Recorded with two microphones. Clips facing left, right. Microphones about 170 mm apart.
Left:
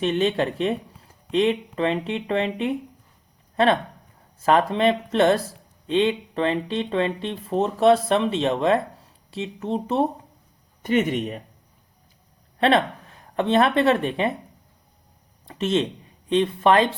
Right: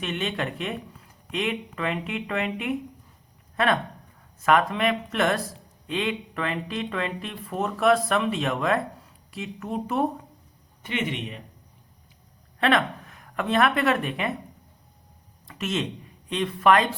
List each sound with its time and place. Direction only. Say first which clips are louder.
0.0 s speech: left 8 dB; 30° left (ahead or behind)
4.4 s speech: left 2 dB; 30° left (ahead or behind)
10.8 s speech: left 8 dB; 45° left (ahead or behind)
12.5 s a woman's voice: left 3 dB; 30° left (ahead or behind)
15.4 s speech: left 6 dB; 30° left (ahead or behind)